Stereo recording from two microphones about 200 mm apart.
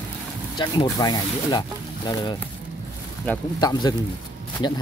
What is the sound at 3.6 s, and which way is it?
Speech, 20° left (ahead or behind).